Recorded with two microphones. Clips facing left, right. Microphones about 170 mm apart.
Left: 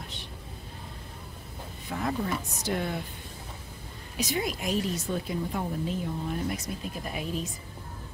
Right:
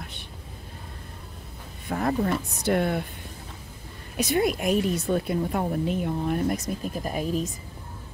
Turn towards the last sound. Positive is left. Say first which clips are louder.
# right 6 dB
turn(degrees=-40)  # may be behind; listen again after turning